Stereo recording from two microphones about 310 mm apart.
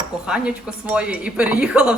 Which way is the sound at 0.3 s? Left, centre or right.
Centre.